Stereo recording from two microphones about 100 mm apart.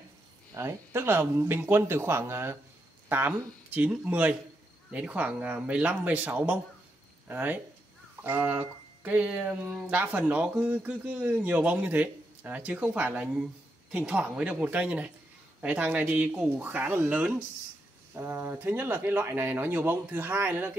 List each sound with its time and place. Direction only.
0.6 s speech: 30° right (ahead or behind)